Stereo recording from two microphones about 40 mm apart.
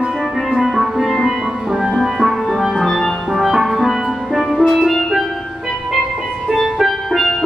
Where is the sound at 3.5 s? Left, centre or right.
Centre.